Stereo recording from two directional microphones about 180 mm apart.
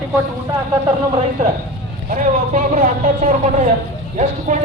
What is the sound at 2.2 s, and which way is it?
Speech, 45° right (ahead or behind).